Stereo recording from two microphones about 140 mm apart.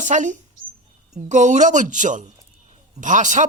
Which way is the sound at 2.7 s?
60° right (ahead or behind).